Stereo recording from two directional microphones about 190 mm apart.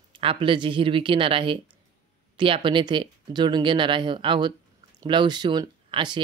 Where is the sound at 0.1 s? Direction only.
30° right (ahead or behind).